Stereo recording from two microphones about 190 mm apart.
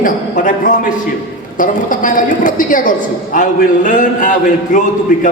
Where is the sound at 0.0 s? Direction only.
45° left (ahead or behind).